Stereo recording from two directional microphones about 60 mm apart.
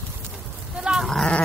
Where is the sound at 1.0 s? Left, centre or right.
Centre.